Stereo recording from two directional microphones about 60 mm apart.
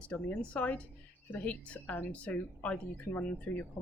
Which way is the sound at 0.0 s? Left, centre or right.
Left.